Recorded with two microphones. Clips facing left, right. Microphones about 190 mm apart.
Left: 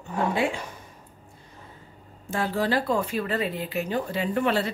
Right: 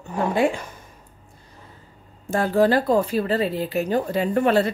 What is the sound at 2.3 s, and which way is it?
Speech, 45° right (ahead or behind).